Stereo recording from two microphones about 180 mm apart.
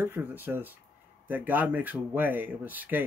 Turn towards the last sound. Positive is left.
turn(degrees=-10)  # may be behind; listen again after turning